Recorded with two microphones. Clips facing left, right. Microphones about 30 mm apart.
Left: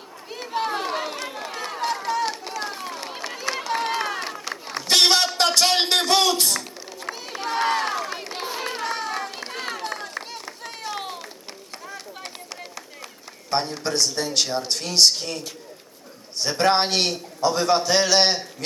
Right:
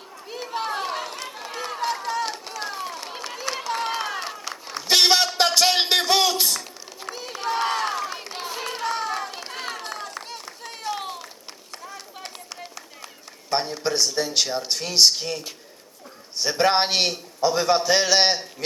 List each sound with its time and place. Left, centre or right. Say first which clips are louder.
0.3 s run: left 2 dB; centre
4.9 s a sound: even; centre
13.5 s a man's voice: even; centre